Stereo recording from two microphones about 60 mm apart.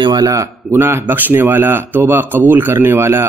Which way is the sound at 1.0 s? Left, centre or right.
Right.